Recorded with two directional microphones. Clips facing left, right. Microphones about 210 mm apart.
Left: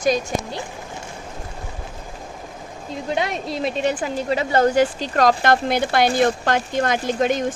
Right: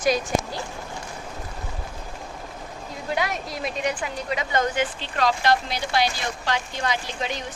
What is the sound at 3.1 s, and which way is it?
A woman's voice, 25° left (ahead or behind).